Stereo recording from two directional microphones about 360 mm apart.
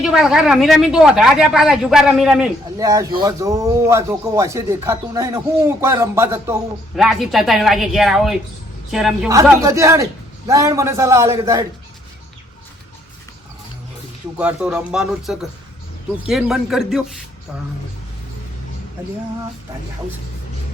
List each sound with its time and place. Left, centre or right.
0.0 s a woman's voice: centre
14.3 s a woman's voice: centre